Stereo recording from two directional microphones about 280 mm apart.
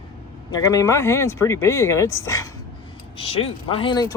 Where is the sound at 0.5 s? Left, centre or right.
Centre.